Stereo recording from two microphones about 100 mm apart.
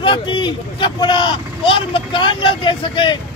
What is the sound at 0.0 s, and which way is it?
Speech, 55° left (ahead or behind).